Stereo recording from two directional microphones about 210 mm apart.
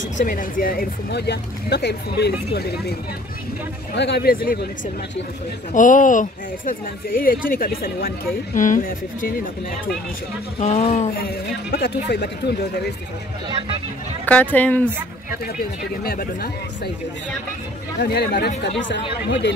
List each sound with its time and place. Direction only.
0.2 s speech: 40° left (ahead or behind)
5.7 s speech: 40° left (ahead or behind)
10.6 s speech: 30° left (ahead or behind)
11.1 s speech: 50° left (ahead or behind)
13.5 s speech: 25° right (ahead or behind)
14.2 s speech: 5° left (ahead or behind)
16.0 s speech: 45° left (ahead or behind)
18.0 s speech: 50° left (ahead or behind)